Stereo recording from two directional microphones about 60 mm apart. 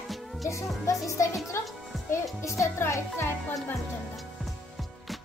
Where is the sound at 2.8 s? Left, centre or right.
Left.